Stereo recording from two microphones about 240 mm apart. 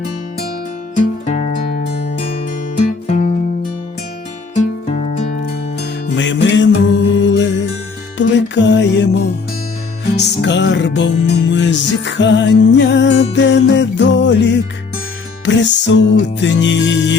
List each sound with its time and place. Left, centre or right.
0.9 s music: left
4.5 s music: left
5.8 s music: left
10.2 s music: left